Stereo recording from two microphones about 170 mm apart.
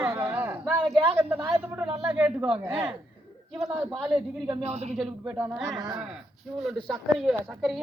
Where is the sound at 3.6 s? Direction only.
10° right (ahead or behind).